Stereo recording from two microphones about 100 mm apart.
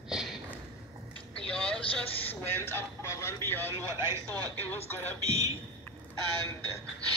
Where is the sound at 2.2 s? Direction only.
20° left (ahead or behind).